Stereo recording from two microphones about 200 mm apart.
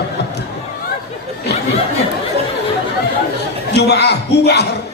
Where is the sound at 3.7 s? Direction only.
55° left (ahead or behind).